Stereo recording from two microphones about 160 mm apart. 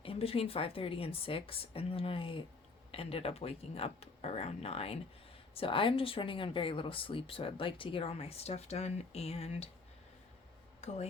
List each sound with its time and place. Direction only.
0.0 s speech: 35° left (ahead or behind)
10.8 s speech: 40° left (ahead or behind)